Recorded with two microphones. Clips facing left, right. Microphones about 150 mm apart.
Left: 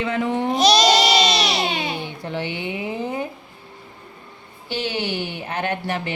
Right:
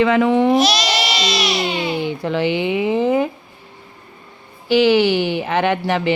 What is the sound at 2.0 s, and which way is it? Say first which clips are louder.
Speech: right 9 dB; 90° right.